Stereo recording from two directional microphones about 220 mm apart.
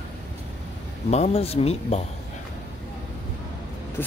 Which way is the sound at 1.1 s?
30° left (ahead or behind).